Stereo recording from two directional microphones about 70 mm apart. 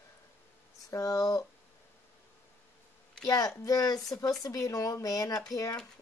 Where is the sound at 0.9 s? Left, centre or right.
Left.